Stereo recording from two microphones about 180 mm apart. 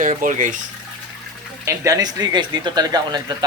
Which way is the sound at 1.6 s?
15° right (ahead or behind).